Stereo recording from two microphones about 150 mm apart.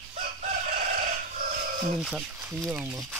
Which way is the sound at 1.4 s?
55° right (ahead or behind).